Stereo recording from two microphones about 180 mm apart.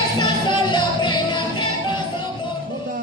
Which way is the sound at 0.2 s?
25° left (ahead or behind).